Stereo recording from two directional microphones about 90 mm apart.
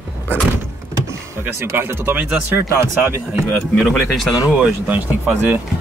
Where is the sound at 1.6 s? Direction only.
30° right (ahead or behind).